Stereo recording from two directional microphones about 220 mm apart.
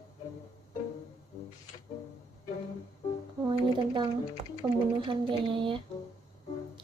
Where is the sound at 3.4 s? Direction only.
20° right (ahead or behind).